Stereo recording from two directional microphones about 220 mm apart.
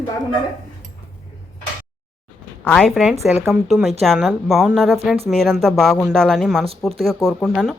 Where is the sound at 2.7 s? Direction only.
5° left (ahead or behind).